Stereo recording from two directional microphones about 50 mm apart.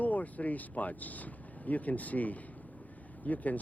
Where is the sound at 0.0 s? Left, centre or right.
Left.